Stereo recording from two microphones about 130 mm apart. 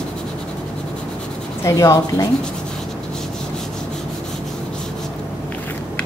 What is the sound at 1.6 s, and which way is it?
Speech, 25° left (ahead or behind).